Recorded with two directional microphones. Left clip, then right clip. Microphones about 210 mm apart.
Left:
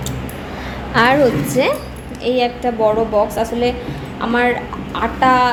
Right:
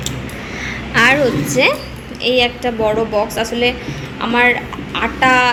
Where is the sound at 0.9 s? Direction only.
20° left (ahead or behind).